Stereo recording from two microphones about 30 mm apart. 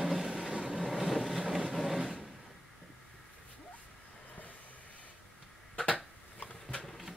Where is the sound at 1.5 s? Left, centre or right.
Centre.